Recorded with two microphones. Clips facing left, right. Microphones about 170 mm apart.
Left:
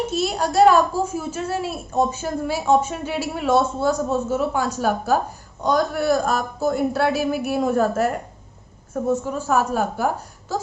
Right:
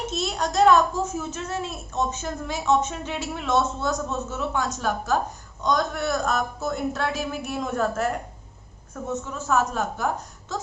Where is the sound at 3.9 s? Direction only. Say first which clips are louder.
Left 6 dB; 30° left (ahead or behind).